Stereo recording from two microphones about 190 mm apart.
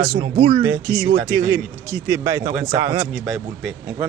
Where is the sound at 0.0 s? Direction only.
25° right (ahead or behind).